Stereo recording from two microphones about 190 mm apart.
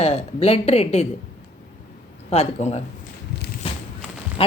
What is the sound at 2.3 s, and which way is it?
Speech, 35° left (ahead or behind).